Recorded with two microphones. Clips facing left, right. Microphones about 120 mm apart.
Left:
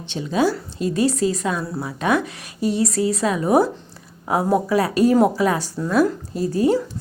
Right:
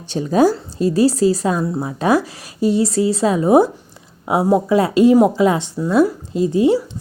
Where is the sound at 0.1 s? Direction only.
40° right (ahead or behind).